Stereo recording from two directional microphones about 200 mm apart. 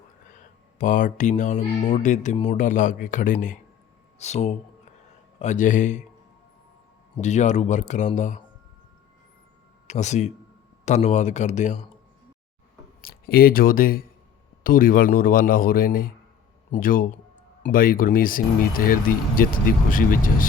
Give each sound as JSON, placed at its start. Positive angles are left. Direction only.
{"t": 0.8, "sound": "speech", "side_deg": 40}
{"t": 7.2, "sound": "speech", "side_deg": 35}
{"t": 9.8, "sound": "speech", "side_deg": 35}
{"t": 13.0, "sound": "speech", "side_deg": 50}